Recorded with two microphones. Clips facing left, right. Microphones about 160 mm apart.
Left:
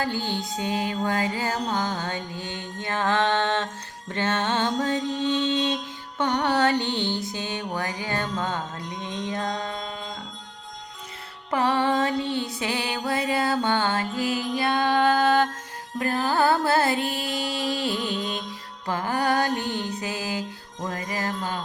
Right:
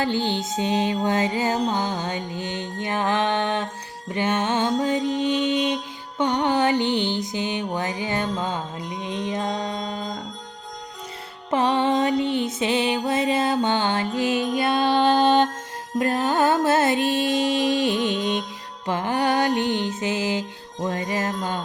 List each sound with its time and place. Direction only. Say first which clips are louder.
0.0 s music: right 4 dB; 20° right (ahead or behind)
2.8 s mantra: right 1 dB; 15° right (ahead or behind)
8.4 s music: right 1 dB; 15° right (ahead or behind)
9.7 s music: right 5 dB; 35° right (ahead or behind)
11.5 s music: right 2 dB; 20° right (ahead or behind)